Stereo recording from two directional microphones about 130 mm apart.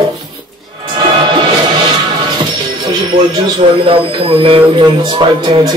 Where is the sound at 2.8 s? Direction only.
35° right (ahead or behind).